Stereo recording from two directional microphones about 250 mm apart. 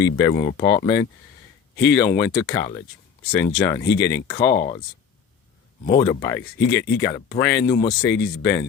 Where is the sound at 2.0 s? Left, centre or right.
Centre.